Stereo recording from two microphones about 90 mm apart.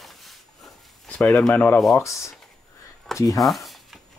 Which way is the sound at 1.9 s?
35° left (ahead or behind).